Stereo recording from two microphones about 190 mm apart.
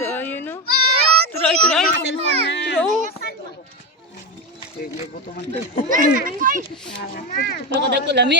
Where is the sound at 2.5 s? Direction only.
65° left (ahead or behind).